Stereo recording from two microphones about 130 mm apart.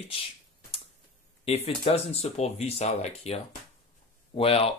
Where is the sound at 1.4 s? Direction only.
50° left (ahead or behind).